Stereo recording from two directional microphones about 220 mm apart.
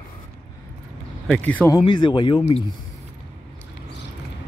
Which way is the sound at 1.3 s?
5° left (ahead or behind).